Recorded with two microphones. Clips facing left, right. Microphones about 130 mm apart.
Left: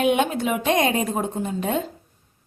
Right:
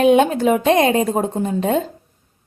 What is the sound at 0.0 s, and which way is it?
Speech, 40° right (ahead or behind).